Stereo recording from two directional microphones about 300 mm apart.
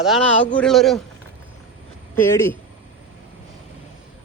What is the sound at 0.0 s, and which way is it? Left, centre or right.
A man's voice, centre.